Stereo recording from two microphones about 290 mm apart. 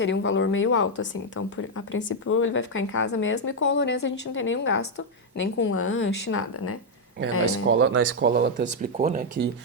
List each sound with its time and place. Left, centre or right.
0.0 s speech: left
7.7 s speech: right